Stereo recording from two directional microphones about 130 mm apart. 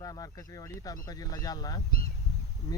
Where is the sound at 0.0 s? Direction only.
30° left (ahead or behind).